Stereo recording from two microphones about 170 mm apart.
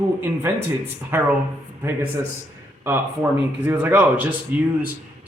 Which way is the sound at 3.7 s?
10° right (ahead or behind).